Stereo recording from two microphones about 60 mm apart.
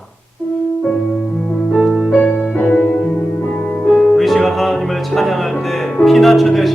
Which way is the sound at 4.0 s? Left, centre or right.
Centre.